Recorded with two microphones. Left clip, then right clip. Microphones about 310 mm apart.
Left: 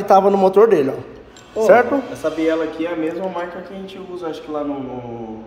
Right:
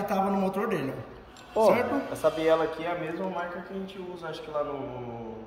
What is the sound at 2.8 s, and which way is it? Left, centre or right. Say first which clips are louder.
Speech: left 8 dB; centre.